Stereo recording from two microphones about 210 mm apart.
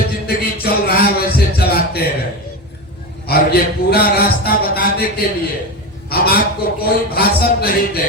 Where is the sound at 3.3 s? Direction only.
50° left (ahead or behind).